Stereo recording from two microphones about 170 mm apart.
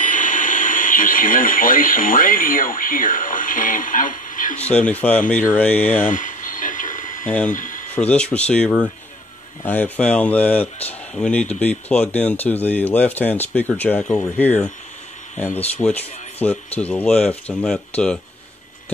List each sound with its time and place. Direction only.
0.0 s speech: 50° left (ahead or behind)
4.6 s speech: 10° left (ahead or behind)
6.0 s radio: 50° left (ahead or behind)
7.4 s speech: 50° left (ahead or behind)
7.9 s speech: 5° left (ahead or behind)